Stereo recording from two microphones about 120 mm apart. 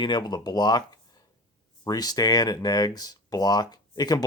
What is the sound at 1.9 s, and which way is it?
Speech, 30° left (ahead or behind).